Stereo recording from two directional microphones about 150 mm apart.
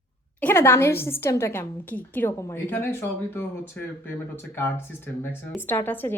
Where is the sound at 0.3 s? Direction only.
15° left (ahead or behind).